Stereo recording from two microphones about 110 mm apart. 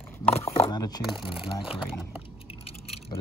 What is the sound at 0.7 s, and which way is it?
Speech, 40° left (ahead or behind).